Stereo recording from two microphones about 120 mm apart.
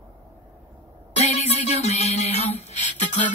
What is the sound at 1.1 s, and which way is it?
Music, 65° left (ahead or behind).